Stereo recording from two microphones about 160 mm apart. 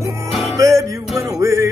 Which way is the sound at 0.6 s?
20° right (ahead or behind).